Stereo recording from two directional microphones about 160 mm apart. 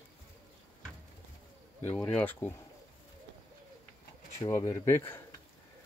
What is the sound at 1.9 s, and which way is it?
Speech, 10° left (ahead or behind).